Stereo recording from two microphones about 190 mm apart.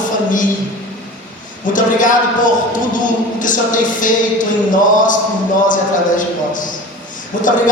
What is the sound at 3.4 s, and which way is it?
Speech, 45° left (ahead or behind).